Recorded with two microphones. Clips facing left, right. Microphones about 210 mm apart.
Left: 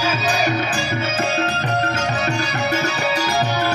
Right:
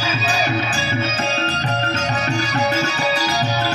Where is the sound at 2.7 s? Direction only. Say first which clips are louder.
Even; 55° left (ahead or behind).